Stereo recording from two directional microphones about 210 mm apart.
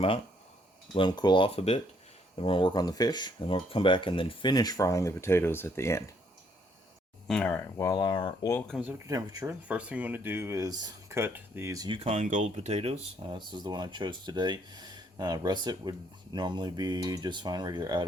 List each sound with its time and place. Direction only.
0.9 s speech: 20° left (ahead or behind)
7.3 s speech: 5° left (ahead or behind)
8.6 s speech: 5° right (ahead or behind)
11.9 s speech: 30° right (ahead or behind)